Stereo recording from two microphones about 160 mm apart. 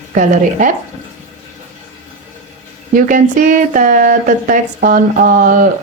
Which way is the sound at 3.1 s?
55° right (ahead or behind).